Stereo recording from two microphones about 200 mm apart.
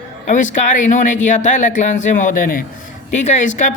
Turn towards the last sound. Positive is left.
turn(degrees=40)  # may be behind; listen again after turning